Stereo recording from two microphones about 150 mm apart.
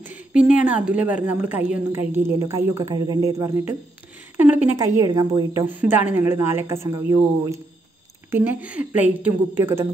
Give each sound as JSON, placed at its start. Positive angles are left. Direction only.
{"t": 0.0, "sound": "a woman's voice", "side_deg": -10}
{"t": 4.4, "sound": "a woman's voice", "side_deg": -10}
{"t": 5.8, "sound": "a woman's voice", "side_deg": -10}